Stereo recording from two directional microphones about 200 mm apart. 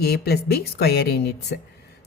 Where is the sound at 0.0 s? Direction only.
55° left (ahead or behind).